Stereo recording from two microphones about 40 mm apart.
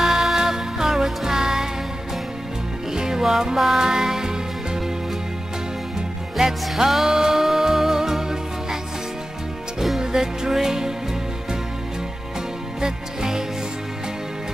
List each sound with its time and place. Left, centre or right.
0.0 s music: centre
2.9 s music: centre
5.9 s music: centre
9.8 s music: centre
12.8 s music: centre